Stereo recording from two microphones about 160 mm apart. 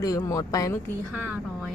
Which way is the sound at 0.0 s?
20° left (ahead or behind).